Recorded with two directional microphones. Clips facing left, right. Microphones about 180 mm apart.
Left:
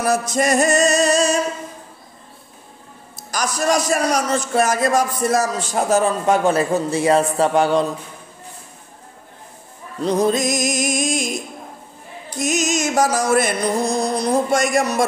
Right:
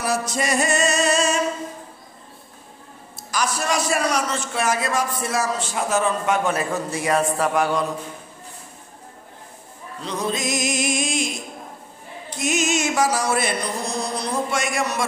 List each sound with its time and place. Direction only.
0.0 s a man's voice: 45° left (ahead or behind)
3.2 s a man's voice: 40° left (ahead or behind)
10.0 s music: 45° left (ahead or behind)